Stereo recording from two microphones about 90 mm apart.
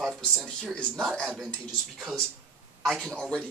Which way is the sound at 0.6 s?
10° left (ahead or behind).